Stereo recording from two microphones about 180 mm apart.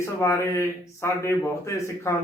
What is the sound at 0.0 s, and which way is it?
A man's voice, 15° left (ahead or behind).